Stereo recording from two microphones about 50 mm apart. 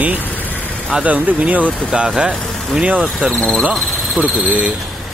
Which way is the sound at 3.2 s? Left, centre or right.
Right.